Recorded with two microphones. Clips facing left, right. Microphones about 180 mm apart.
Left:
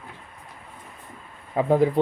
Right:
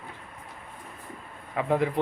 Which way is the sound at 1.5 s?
35° left (ahead or behind).